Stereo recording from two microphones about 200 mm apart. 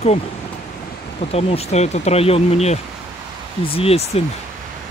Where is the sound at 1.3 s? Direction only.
30° left (ahead or behind).